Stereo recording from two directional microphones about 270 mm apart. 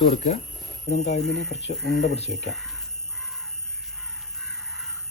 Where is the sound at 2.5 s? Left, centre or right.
Centre.